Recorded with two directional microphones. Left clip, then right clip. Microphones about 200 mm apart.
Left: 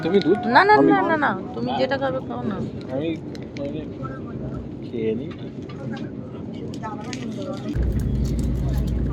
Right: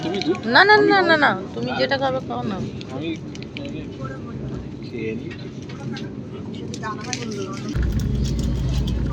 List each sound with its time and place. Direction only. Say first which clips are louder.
0.0 s speech: left 4 dB; 50° left (ahead or behind)
0.5 s speech: right 2 dB; centre (ahead or behind)
0.9 s speech: right 3 dB; 15° right (ahead or behind)
1.5 s speech: right 1 dB; centre (ahead or behind)